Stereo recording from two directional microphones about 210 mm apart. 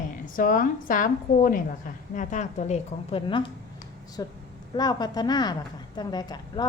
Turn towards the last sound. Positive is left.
turn(degrees=20)  # may be behind; listen again after turning